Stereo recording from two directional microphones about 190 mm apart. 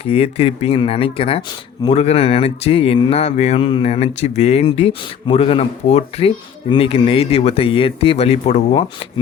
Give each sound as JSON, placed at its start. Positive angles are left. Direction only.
{"t": 0.2, "sound": "speech", "side_deg": 30}